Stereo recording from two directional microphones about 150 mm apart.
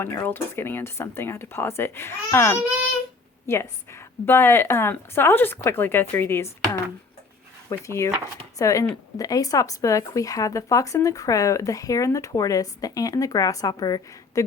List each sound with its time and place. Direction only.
0.3 s a woman's voice: 15° left (ahead or behind)